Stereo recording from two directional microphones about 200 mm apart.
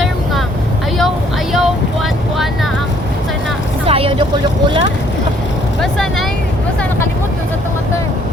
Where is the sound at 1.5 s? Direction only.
Centre (ahead or behind).